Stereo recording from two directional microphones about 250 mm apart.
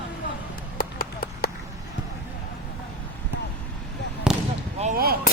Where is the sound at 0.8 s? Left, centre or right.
Left.